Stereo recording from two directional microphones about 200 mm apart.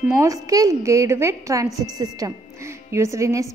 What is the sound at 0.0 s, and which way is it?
A woman's voice, 15° right (ahead or behind).